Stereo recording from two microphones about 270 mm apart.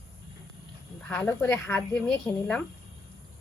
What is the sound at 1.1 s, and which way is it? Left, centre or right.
A woman's voice, centre.